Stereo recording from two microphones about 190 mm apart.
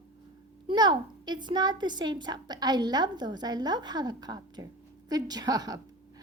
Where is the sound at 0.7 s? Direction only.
25° right (ahead or behind).